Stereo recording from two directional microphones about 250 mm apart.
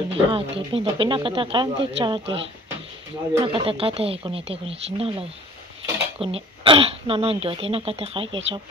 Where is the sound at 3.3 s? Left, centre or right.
Right.